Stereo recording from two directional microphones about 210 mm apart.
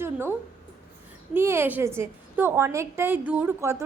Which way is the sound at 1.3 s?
10° right (ahead or behind).